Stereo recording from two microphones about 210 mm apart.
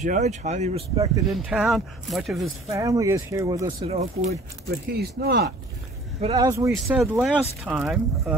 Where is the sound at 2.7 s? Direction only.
15° right (ahead or behind).